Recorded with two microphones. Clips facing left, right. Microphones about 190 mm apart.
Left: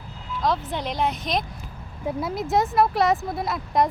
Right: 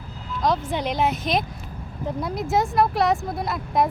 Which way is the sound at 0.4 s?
Centre (ahead or behind).